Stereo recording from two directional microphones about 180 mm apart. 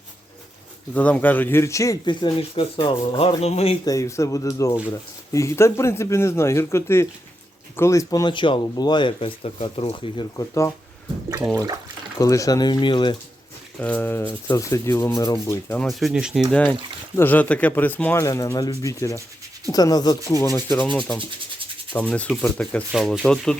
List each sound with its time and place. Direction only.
0.9 s speech: 10° left (ahead or behind); by 3.8 s 35° left (ahead or behind)
3.8 s speech: 15° left (ahead or behind)
12.2 s speech: 20° left (ahead or behind)
13.7 s speech: 10° left (ahead or behind)
15.8 s speech: centre (ahead or behind)